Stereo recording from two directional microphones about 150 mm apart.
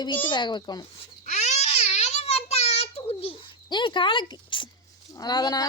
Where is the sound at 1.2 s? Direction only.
50° left (ahead or behind); by 4.7 s 30° left (ahead or behind).